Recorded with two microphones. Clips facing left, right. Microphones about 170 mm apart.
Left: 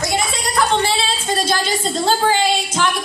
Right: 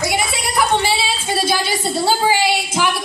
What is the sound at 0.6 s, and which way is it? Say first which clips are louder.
A woman's voice: even; 10° right (ahead or behind).